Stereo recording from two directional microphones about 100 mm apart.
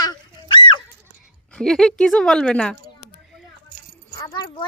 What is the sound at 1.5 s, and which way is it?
Speech, 5° left (ahead or behind).